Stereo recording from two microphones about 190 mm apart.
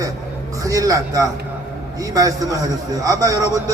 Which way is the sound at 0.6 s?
15° right (ahead or behind).